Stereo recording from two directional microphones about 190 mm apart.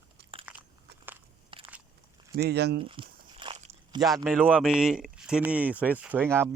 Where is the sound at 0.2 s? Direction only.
55° right (ahead or behind).